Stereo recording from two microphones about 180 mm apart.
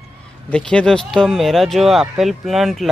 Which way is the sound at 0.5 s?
5° left (ahead or behind).